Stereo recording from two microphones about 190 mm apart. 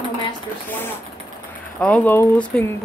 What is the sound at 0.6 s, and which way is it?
Speech, 10° left (ahead or behind).